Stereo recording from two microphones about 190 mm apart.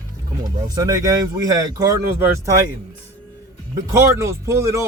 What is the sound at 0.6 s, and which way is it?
A man's voice, 20° right (ahead or behind).